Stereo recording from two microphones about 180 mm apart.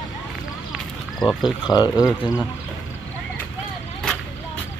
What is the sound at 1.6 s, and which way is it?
Speech, 25° left (ahead or behind).